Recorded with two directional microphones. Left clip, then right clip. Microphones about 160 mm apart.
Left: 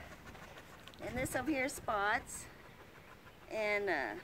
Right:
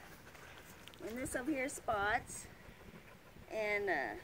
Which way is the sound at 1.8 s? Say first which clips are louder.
Even; 5° left (ahead or behind).